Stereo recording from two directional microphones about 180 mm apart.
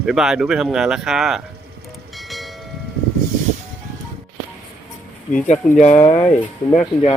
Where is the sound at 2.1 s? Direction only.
Centre (ahead or behind).